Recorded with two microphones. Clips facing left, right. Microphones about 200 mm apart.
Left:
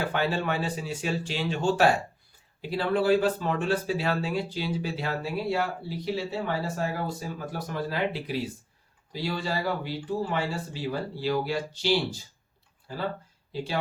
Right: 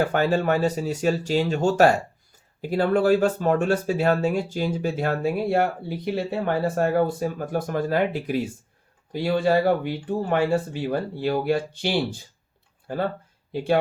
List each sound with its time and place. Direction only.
0.1 s speech: 45° right (ahead or behind)